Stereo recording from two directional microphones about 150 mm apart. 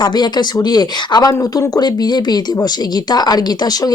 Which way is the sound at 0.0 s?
30° left (ahead or behind).